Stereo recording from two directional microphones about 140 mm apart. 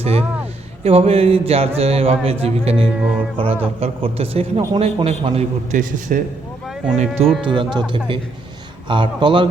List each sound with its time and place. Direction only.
0.0 s speech: 45° right (ahead or behind)
3.0 s music: 10° right (ahead or behind)
3.3 s a man's voice: 40° right (ahead or behind)
5.0 s speech: 45° right (ahead or behind)
5.7 s a man's voice: 75° right (ahead or behind)
6.9 s speech: 55° right (ahead or behind)
7.4 s a man's voice: 35° right (ahead or behind)
8.9 s a man's voice: 35° right (ahead or behind)